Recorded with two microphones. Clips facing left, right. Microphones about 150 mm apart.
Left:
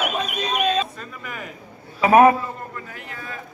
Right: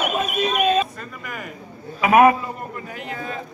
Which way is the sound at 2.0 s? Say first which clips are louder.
Left 1 dB; 30° left (ahead or behind).